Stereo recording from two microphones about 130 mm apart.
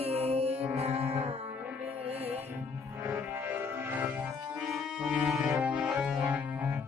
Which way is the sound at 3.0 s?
15° right (ahead or behind).